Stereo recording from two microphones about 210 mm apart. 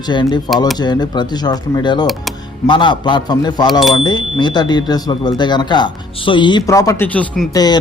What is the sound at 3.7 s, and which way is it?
Speech, centre (ahead or behind).